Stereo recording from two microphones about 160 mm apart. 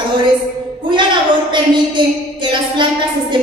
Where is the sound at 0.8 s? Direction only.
30° right (ahead or behind).